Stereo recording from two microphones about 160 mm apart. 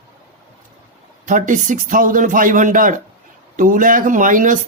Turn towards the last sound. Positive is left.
turn(degrees=-55)  # may be behind; listen again after turning